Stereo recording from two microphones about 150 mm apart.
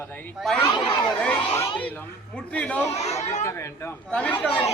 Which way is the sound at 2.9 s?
45° left (ahead or behind).